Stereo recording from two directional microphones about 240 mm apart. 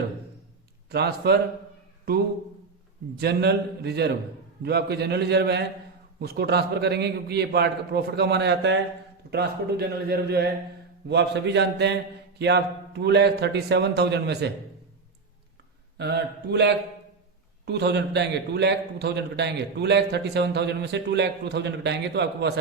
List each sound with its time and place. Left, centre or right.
0.9 s a man's voice: right
3.2 s a man's voice: right
16.0 s a man's voice: right